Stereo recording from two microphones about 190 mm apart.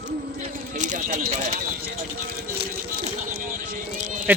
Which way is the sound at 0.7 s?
40° right (ahead or behind).